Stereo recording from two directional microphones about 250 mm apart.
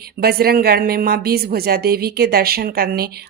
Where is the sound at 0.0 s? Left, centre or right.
Right.